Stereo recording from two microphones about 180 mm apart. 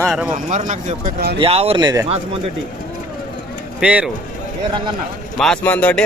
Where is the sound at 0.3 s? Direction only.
45° right (ahead or behind).